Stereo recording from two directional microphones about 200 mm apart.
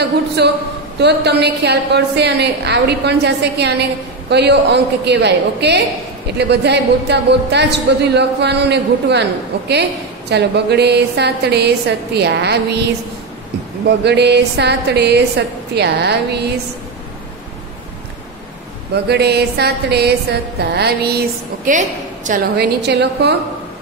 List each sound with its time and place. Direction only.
0.4 s a woman's voice: 55° right (ahead or behind)
13.8 s a woman's voice: 55° right (ahead or behind)
19.0 s a woman's voice: 55° right (ahead or behind)
21.6 s a woman's voice: 40° right (ahead or behind); by 23.3 s 55° right (ahead or behind)